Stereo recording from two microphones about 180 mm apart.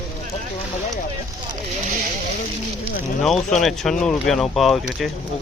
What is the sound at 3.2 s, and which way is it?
Speech, centre (ahead or behind).